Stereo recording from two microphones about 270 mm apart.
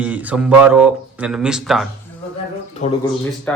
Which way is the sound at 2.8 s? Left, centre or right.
Left.